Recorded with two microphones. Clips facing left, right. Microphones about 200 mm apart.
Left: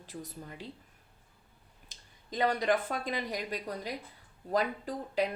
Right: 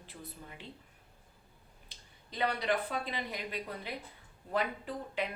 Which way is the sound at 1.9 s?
45° left (ahead or behind).